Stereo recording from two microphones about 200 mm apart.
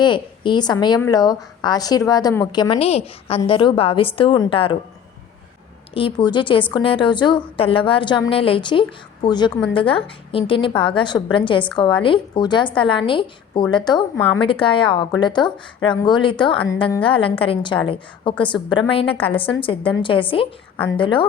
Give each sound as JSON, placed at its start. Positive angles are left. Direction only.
{"t": 0.0, "sound": "a woman's voice", "side_deg": 25}
{"t": 5.9, "sound": "a woman's voice", "side_deg": 25}